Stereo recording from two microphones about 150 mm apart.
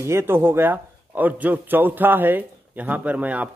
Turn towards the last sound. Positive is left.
turn(degrees=-10)  # may be behind; listen again after turning